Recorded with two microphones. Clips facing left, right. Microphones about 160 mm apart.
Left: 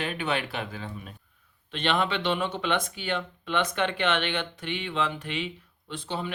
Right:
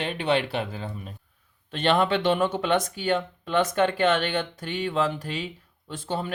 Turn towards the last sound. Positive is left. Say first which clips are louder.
# right 3 dB
turn(degrees=-45)  # may be behind; listen again after turning